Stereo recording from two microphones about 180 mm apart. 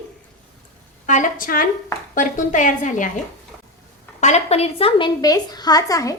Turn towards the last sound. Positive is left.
turn(degrees=20)  # may be behind; listen again after turning